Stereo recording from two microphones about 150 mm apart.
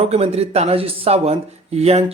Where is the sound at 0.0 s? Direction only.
40° right (ahead or behind).